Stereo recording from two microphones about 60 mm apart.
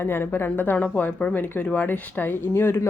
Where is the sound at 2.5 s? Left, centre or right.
Left.